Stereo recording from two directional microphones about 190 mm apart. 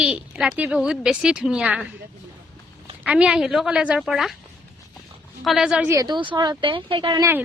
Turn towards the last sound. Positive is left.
turn(degrees=-15)  # may be behind; listen again after turning